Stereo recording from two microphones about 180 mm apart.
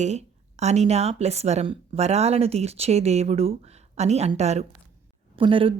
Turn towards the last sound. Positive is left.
turn(degrees=-30)  # may be behind; listen again after turning